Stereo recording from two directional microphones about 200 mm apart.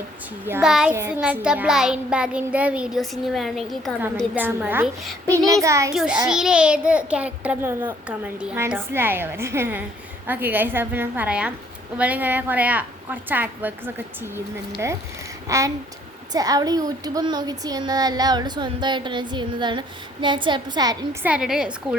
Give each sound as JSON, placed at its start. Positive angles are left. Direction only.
{"t": 0.4, "sound": "a child's voice", "side_deg": -5}
{"t": 4.4, "sound": "a child's voice", "side_deg": -10}
{"t": 5.9, "sound": "a child's voice", "side_deg": -5}
{"t": 15.4, "sound": "speech", "side_deg": -15}
{"t": 21.2, "sound": "a child's voice", "side_deg": -5}